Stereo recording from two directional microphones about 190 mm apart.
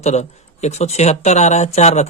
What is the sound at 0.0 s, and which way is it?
Speech, 35° left (ahead or behind).